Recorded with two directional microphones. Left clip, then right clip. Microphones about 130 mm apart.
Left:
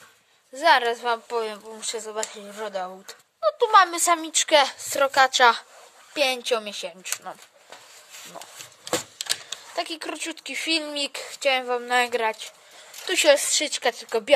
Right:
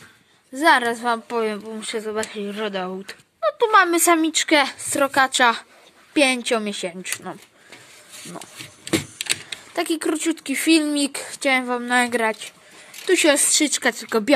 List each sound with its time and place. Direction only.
0.6 s a woman's voice: centre (ahead or behind)
3.4 s speech: 5° right (ahead or behind)
4.2 s a woman's voice: 15° left (ahead or behind)
6.1 s speech: centre (ahead or behind)
9.8 s speech: centre (ahead or behind)
13.0 s speech: 30° left (ahead or behind)
13.3 s a woman's voice: 10° left (ahead or behind)
13.7 s speech: centre (ahead or behind)